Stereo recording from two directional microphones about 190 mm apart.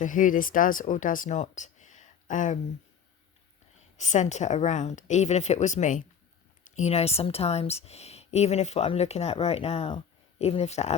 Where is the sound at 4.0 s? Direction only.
40° left (ahead or behind).